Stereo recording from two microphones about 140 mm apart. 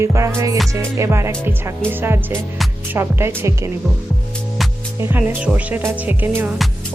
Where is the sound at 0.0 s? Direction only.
20° right (ahead or behind).